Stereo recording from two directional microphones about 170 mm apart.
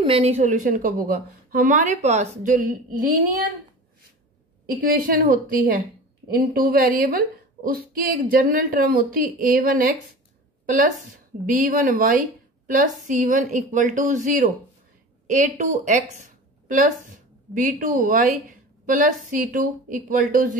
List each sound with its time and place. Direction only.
0.0 s a woman's voice: 35° right (ahead or behind); by 3.2 s 55° right (ahead or behind)
4.8 s a child's voice: 55° right (ahead or behind)
11.4 s a woman's voice: 55° right (ahead or behind)